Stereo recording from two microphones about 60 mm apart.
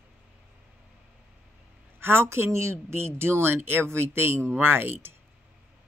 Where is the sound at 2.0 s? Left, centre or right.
Right.